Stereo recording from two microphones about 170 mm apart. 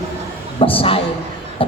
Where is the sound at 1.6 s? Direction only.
30° left (ahead or behind).